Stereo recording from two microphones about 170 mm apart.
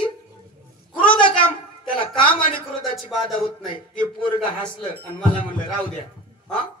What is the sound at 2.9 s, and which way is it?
Speech, centre (ahead or behind).